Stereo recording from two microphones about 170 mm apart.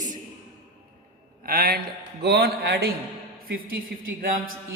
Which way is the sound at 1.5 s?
65° right (ahead or behind).